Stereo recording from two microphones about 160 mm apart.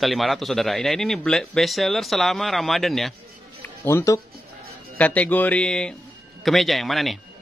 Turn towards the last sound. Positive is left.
turn(degrees=0)  # may be behind; listen again after turning